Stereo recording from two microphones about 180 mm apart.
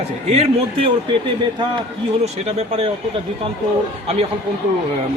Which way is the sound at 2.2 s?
35° right (ahead or behind).